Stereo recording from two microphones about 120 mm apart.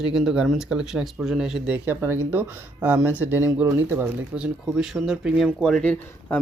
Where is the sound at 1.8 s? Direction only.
15° right (ahead or behind).